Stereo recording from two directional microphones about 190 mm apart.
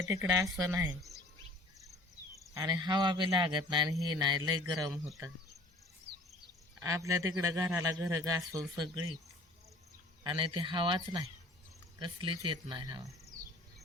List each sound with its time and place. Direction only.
0.0 s speech: 15° right (ahead or behind)
2.6 s speech: 20° right (ahead or behind)
6.7 s speech: 15° right (ahead or behind)
10.2 s speech: 25° right (ahead or behind)